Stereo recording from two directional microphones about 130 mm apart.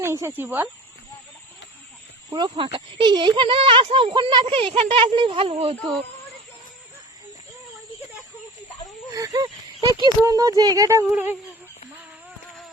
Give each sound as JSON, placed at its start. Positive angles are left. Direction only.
{"t": 0.0, "sound": "speech", "side_deg": -20}
{"t": 2.3, "sound": "speech", "side_deg": -40}
{"t": 9.1, "sound": "speech", "side_deg": -25}